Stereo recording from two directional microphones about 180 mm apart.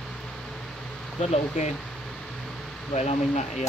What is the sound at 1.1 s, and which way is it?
Speech, 35° left (ahead or behind).